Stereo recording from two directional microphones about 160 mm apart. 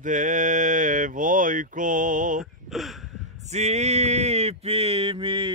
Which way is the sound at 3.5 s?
45° right (ahead or behind).